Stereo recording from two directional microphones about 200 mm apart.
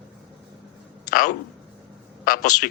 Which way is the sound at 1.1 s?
45° left (ahead or behind).